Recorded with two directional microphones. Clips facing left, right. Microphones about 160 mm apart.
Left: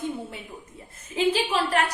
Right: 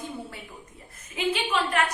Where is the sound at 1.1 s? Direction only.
30° left (ahead or behind).